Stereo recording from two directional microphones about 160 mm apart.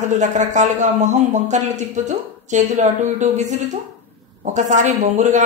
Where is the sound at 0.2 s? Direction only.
50° right (ahead or behind).